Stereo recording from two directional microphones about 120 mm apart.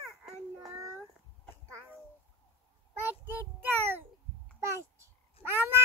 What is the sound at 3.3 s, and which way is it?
Child singing, 15° right (ahead or behind).